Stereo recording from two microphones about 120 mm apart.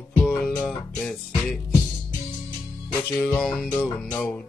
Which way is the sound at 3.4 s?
5° left (ahead or behind).